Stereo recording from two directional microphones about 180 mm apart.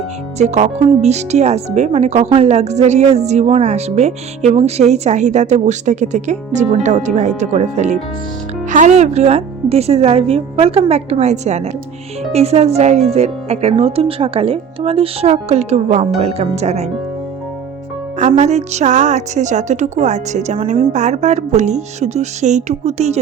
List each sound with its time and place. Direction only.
0.3 s speech: 40° right (ahead or behind)
18.2 s speech: 40° right (ahead or behind)